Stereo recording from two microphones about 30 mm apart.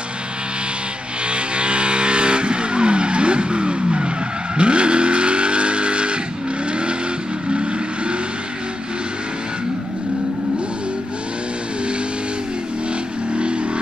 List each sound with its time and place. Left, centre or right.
1.2 s vehicle: right
13.3 s vehicle: right